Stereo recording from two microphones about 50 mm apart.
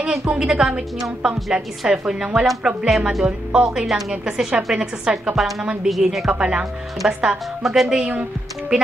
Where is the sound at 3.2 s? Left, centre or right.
Right; by 5.5 s centre.